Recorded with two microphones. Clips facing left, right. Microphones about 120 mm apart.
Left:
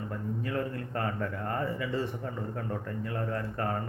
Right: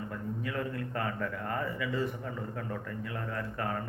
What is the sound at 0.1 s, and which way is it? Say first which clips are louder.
Speech: left 5 dB; 35° left (ahead or behind).